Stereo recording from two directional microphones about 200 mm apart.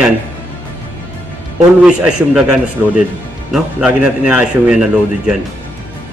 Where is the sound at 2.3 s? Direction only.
5° right (ahead or behind).